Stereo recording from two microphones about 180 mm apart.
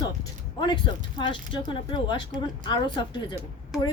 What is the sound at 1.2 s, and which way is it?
Speech, 25° left (ahead or behind).